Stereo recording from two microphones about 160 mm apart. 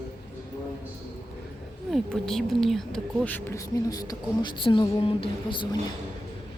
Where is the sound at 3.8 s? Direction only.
25° left (ahead or behind).